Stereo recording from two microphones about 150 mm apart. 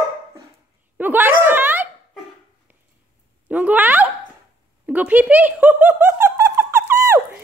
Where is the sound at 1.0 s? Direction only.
10° right (ahead or behind).